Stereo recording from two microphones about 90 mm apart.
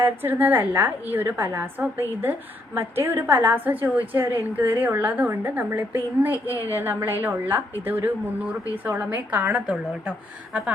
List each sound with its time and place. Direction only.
0.0 s a woman's voice: 20° right (ahead or behind)